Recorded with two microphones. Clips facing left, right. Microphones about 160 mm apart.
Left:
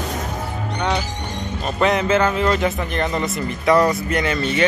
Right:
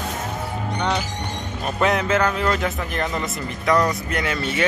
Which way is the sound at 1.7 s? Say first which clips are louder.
Left 2 dB; centre (ahead or behind).